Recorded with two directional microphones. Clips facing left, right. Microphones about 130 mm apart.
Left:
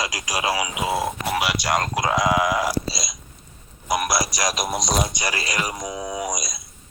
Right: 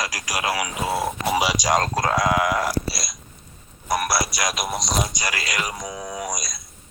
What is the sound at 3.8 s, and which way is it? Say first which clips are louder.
Speech: even; 15° left (ahead or behind).